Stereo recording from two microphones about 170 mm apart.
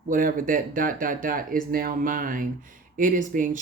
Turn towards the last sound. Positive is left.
turn(degrees=-50)  # may be behind; listen again after turning